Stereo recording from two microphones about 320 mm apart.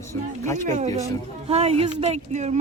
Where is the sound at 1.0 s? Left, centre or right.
Centre.